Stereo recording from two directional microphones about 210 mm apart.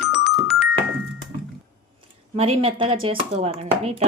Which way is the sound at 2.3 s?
30° right (ahead or behind).